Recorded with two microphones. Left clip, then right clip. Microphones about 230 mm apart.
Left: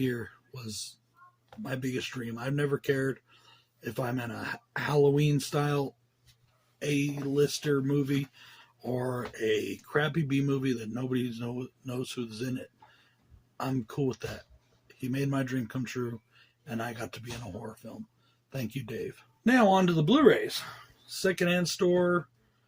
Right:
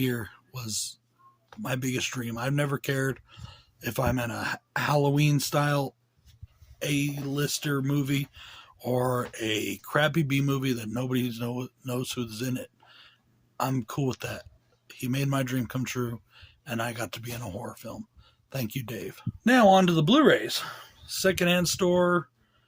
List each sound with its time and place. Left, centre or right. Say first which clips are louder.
0.0 s speech: right 2 dB; right